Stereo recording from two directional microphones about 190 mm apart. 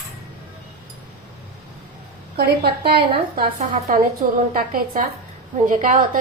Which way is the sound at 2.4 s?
55° right (ahead or behind).